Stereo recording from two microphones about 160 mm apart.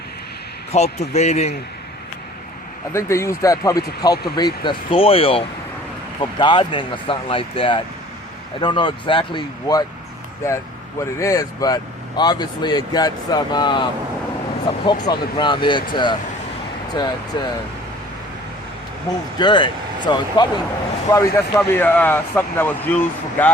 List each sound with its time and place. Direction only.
0.7 s a man's voice: 45° left (ahead or behind)
2.9 s speech: 15° left (ahead or behind); by 5.4 s 35° left (ahead or behind)
6.4 s speech: 30° left (ahead or behind)
11.0 s speech: 20° left (ahead or behind)
19.4 s speech: 30° left (ahead or behind); by 23.5 s 10° left (ahead or behind)